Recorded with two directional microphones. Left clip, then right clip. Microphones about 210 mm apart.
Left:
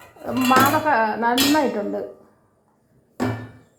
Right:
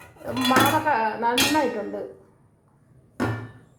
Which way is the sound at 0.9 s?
30° left (ahead or behind).